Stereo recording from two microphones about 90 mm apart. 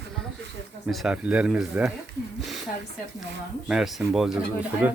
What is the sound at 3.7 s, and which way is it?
Speech, 5° right (ahead or behind).